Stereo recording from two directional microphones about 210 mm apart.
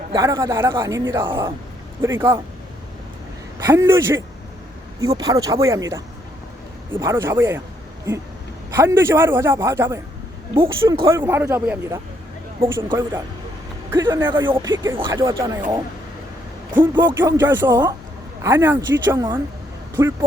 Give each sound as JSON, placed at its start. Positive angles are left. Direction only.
{"t": 0.1, "sound": "speech", "side_deg": -15}
{"t": 3.7, "sound": "speech", "side_deg": -15}
{"t": 8.7, "sound": "speech", "side_deg": -15}
{"t": 10.5, "sound": "speech", "side_deg": -25}
{"t": 11.0, "sound": "speech", "side_deg": -10}
{"t": 16.7, "sound": "speech", "side_deg": -10}